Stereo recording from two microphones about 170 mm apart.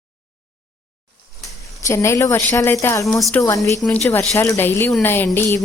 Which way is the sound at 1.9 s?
15° left (ahead or behind).